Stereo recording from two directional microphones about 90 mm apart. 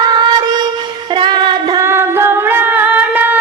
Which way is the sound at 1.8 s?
30° right (ahead or behind).